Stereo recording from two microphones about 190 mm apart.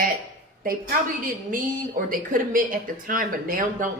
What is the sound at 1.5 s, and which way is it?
Speech, 45° right (ahead or behind).